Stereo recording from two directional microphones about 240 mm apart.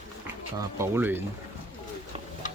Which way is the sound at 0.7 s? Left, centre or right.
Centre.